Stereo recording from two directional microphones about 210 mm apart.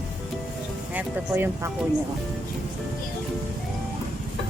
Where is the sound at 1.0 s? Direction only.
10° right (ahead or behind).